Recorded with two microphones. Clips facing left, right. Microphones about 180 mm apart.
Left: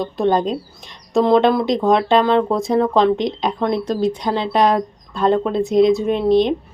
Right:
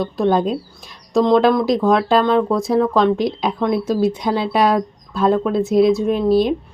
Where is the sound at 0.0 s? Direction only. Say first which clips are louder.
Right 1 dB; centre (ahead or behind).